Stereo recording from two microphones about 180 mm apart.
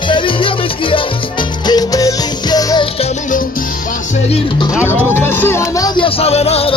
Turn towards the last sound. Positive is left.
turn(degrees=35)  # may be behind; listen again after turning